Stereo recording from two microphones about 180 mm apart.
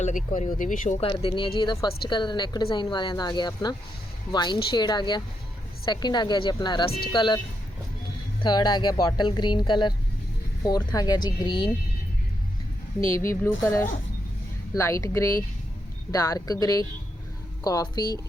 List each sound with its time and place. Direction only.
0.3 s speech: 45° left (ahead or behind)
0.9 s speech: 30° left (ahead or behind)
13.1 s speech: 15° left (ahead or behind)